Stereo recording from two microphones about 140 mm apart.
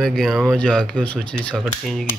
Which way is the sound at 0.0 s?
Centre (ahead or behind).